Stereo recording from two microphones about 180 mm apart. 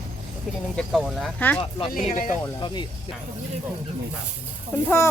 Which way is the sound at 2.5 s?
25° left (ahead or behind).